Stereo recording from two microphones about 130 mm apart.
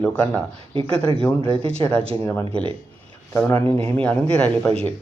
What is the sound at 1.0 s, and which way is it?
Speech, 50° right (ahead or behind).